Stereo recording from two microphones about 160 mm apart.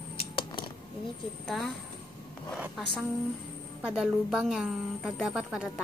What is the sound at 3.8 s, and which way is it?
A woman's voice, centre (ahead or behind).